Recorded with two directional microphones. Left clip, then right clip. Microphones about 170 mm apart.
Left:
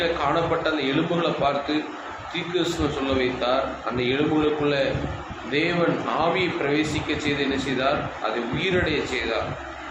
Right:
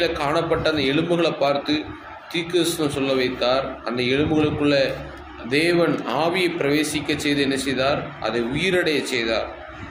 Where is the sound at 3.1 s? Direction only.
65° right (ahead or behind).